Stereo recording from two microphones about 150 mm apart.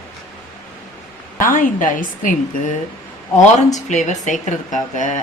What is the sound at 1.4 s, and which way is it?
Speech, 60° left (ahead or behind).